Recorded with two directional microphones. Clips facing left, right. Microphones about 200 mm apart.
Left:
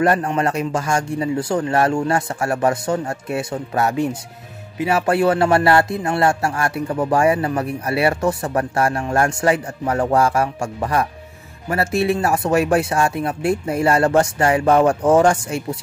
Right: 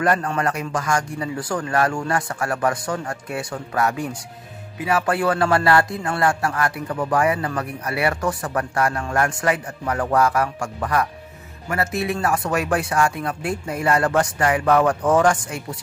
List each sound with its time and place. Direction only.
0.0 s speech: 25° left (ahead or behind)